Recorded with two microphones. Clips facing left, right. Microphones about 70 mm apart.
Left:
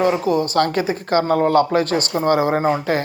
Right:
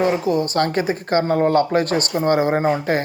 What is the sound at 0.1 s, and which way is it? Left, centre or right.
Speech, right.